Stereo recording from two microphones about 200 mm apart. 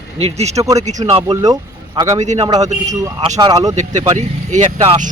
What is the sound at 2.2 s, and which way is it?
Speech, 35° right (ahead or behind).